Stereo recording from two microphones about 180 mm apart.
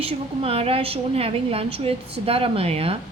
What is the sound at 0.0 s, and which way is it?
A woman's voice, 35° right (ahead or behind).